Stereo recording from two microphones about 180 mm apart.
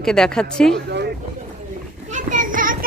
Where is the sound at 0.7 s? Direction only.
70° right (ahead or behind).